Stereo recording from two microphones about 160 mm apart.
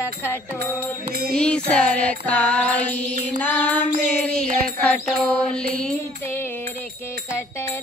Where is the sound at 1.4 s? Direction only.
5° left (ahead or behind).